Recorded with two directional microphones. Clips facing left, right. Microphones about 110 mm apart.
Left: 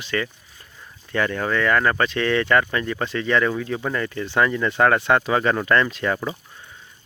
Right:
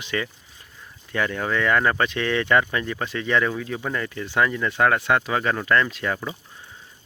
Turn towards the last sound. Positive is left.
turn(degrees=0)  # may be behind; listen again after turning